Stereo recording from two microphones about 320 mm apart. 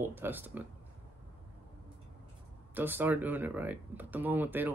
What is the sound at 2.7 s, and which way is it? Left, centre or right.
Speech, centre.